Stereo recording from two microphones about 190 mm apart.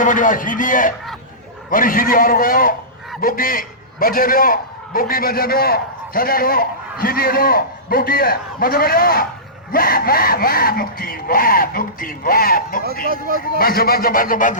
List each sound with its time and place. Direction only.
0.0 s a man's voice: 45° left (ahead or behind)
12.8 s speech: 50° right (ahead or behind)
13.6 s speech: 50° left (ahead or behind)